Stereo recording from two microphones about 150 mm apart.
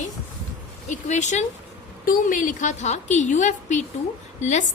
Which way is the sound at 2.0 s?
60° left (ahead or behind).